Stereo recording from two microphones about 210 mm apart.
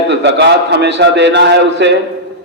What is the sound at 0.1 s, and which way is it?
A man's voice, 55° right (ahead or behind).